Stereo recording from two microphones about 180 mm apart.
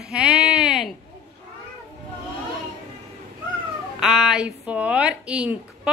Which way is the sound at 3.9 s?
Centre (ahead or behind).